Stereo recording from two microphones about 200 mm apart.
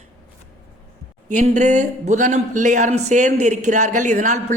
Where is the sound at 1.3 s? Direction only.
35° right (ahead or behind).